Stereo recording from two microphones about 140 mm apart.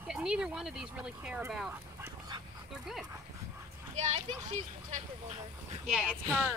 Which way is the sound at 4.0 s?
55° right (ahead or behind).